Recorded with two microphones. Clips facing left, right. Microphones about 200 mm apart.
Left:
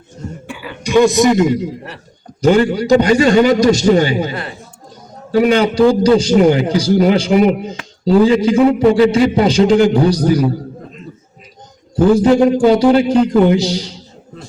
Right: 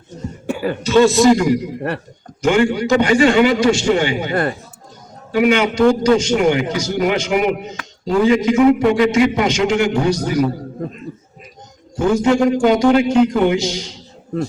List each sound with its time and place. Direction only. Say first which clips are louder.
0.4 s cough: right 9 dB; 45° right (ahead or behind)
0.8 s a man's voice: left 1 dB; 15° left (ahead or behind)
2.4 s a man's voice: left 3 dB; 35° left (ahead or behind)
5.3 s a man's voice: left 3 dB; 35° left (ahead or behind)
11.9 s a man's voice: left 5 dB; 35° left (ahead or behind)